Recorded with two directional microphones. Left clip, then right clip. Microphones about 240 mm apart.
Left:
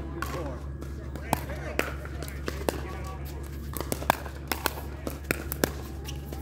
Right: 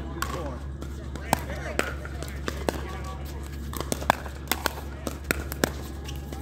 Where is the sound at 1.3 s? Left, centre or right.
Right.